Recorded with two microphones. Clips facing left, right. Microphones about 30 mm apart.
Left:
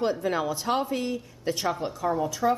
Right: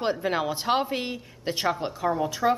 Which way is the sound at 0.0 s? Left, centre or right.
Right.